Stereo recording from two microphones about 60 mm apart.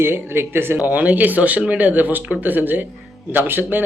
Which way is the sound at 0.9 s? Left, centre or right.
Right.